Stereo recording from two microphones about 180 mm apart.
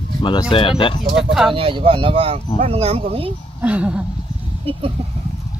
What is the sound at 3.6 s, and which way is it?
Speech, 5° right (ahead or behind).